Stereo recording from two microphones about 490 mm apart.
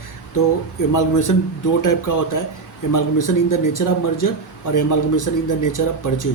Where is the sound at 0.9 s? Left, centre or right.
Left.